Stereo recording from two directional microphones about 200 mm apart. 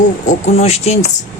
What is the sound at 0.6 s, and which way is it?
Speech, 35° left (ahead or behind).